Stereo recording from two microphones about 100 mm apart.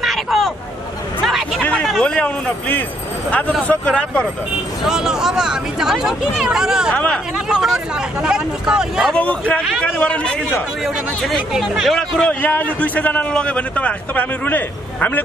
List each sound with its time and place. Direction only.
0.0 s hubbub: centre (ahead or behind)
1.6 s a sound: 15° left (ahead or behind)
1.9 s a man's voice: 5° left (ahead or behind)
4.8 s speech: 5° right (ahead or behind)
9.1 s a man's voice: 15° left (ahead or behind)
11.2 s speech: centre (ahead or behind)
12.4 s a man's voice: 15° left (ahead or behind)